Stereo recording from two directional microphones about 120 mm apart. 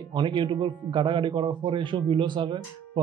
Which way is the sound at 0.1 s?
40° right (ahead or behind).